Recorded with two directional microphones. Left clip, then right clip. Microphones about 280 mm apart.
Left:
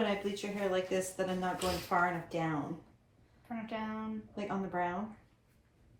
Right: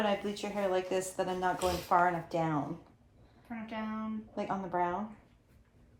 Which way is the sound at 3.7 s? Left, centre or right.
Centre.